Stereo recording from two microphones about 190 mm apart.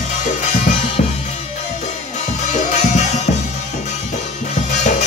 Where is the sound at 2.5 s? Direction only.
35° left (ahead or behind).